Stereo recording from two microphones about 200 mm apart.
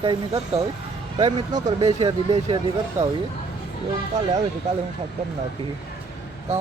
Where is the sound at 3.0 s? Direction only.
15° right (ahead or behind).